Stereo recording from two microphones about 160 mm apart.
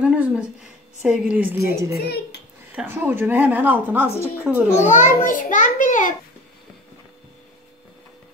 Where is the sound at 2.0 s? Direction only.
85° left.